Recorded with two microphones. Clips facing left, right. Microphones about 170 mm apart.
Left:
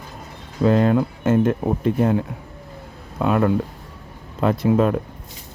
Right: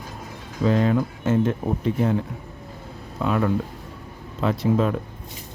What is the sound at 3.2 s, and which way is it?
Speech, 55° left (ahead or behind).